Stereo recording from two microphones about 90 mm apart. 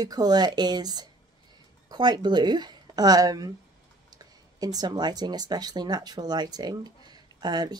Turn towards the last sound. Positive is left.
turn(degrees=-50)  # may be behind; listen again after turning